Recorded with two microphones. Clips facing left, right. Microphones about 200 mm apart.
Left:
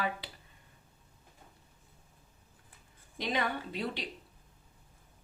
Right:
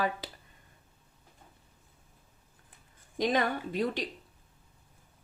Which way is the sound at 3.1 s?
45° right (ahead or behind).